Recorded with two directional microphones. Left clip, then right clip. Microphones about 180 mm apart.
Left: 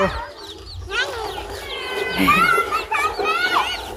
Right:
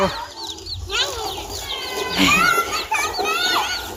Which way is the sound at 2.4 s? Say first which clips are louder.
Left 1 dB; 55° right (ahead or behind).